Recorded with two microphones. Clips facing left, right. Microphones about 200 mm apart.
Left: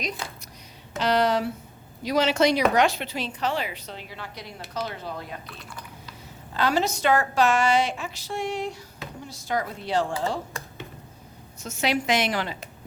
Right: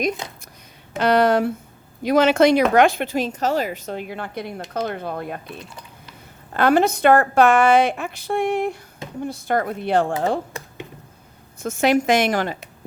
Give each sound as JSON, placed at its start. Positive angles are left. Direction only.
{"t": 0.9, "sound": "a woman's voice", "side_deg": -55}
{"t": 5.5, "sound": "speech", "side_deg": -20}
{"t": 6.5, "sound": "a woman's voice", "side_deg": -55}
{"t": 11.6, "sound": "speech", "side_deg": -50}